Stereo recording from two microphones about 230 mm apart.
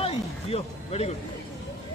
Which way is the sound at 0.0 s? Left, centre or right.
Left.